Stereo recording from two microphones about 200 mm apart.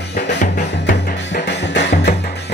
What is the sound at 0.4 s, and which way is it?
Music, 40° left (ahead or behind).